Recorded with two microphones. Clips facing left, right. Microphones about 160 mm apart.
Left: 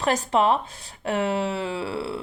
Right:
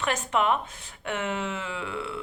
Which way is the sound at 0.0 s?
35° left (ahead or behind).